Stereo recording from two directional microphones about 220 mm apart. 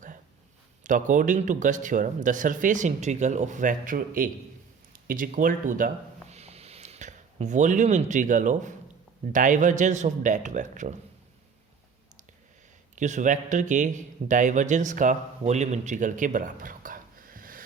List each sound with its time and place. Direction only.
0.9 s speech: 35° right (ahead or behind)
13.0 s a man's voice: 35° right (ahead or behind)